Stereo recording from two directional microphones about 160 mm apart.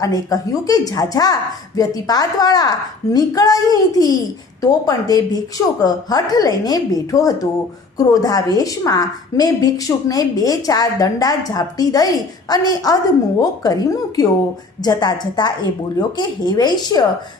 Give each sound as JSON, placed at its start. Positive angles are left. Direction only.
{"t": 0.0, "sound": "a woman's voice", "side_deg": 25}